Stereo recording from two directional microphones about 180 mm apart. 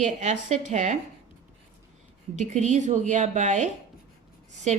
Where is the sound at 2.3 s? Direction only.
40° right (ahead or behind).